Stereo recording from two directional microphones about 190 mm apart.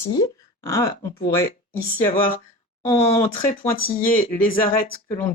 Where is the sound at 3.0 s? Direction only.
30° left (ahead or behind).